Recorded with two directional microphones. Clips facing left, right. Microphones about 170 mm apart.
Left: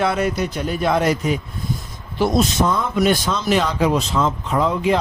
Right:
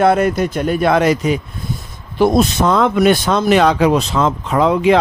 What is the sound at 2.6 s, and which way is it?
Speech, 80° right.